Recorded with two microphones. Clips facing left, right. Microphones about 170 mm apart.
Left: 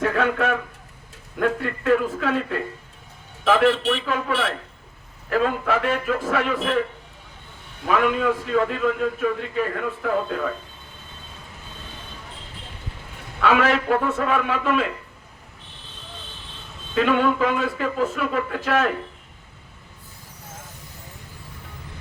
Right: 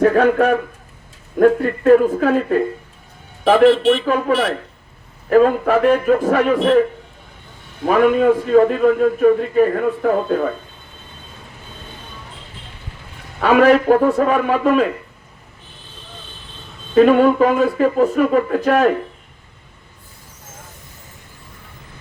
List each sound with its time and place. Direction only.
0.0 s a man's voice: 45° right (ahead or behind)
7.9 s a man's voice: 45° right (ahead or behind)
13.4 s a man's voice: 45° right (ahead or behind)
16.9 s a man's voice: 45° right (ahead or behind)